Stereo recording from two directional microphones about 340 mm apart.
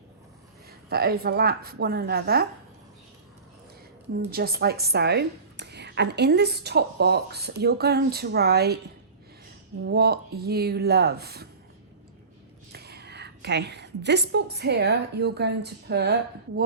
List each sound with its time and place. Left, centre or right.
0.9 s a woman's voice: right
4.1 s a woman's voice: right
9.8 s a woman's voice: right
12.7 s a woman's voice: right